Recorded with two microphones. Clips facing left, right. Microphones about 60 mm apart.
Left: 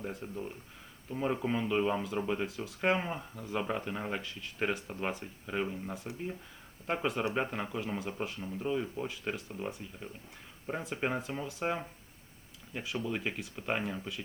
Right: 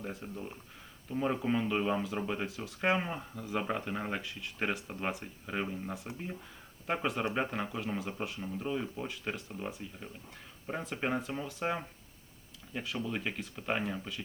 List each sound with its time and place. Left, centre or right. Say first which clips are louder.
0.0 s speech: left 2 dB; centre